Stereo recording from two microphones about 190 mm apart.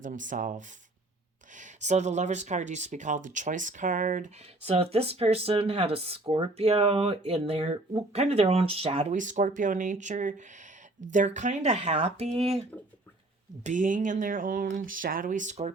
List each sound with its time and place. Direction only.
0.0 s speech: 45° right (ahead or behind)
13.7 s speech: 40° right (ahead or behind)